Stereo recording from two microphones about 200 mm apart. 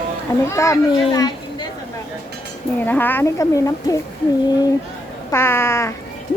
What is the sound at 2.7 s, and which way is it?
Speech, 10° left (ahead or behind).